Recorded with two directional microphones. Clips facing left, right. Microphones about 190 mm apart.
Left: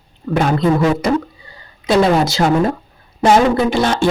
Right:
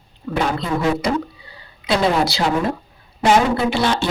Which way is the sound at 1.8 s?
45° left (ahead or behind).